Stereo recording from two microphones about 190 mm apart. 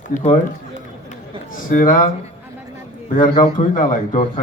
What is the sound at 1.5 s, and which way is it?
Speech, 45° left (ahead or behind).